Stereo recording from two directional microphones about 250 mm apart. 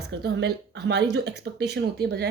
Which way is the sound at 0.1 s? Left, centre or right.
Right.